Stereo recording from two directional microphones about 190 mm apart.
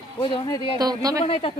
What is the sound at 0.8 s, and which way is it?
Speech, 20° right (ahead or behind).